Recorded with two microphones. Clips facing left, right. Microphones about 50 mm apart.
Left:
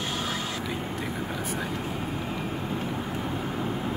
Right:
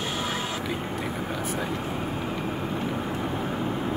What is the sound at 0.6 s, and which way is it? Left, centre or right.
Vehicle, centre.